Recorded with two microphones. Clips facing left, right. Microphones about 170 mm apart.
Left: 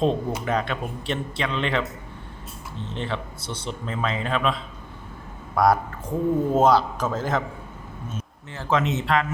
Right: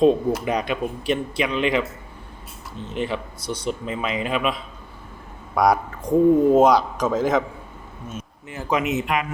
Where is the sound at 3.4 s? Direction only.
25° left (ahead or behind).